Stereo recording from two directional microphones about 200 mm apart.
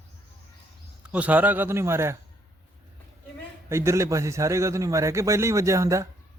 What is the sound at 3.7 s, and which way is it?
A man's voice, 15° right (ahead or behind).